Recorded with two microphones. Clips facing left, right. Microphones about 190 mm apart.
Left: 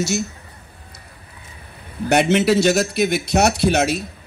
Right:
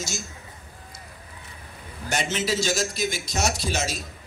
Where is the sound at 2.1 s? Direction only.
65° left (ahead or behind).